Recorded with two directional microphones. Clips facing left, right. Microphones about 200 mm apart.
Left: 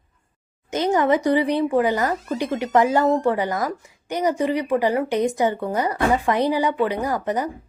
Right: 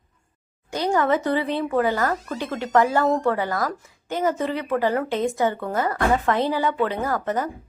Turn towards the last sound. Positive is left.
turn(degrees=15)  # may be behind; listen again after turning